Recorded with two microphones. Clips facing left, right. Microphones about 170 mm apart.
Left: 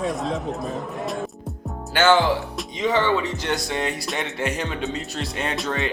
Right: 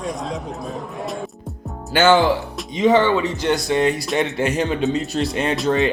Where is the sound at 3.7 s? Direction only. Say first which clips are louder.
Right 8 dB; 35° right (ahead or behind).